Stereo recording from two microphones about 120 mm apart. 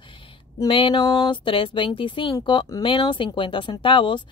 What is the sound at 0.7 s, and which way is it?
A woman's voice, 45° left (ahead or behind).